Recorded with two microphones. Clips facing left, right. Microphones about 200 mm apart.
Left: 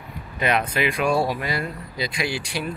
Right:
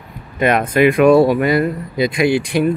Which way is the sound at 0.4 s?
50° right (ahead or behind).